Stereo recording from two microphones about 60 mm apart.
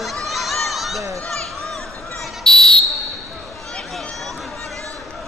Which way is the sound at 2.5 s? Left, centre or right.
Centre.